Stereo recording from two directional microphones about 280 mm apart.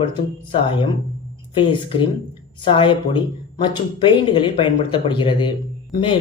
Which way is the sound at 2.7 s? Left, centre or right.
Centre.